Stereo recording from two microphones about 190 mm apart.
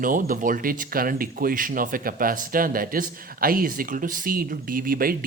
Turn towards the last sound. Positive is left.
turn(degrees=-50)  # may be behind; listen again after turning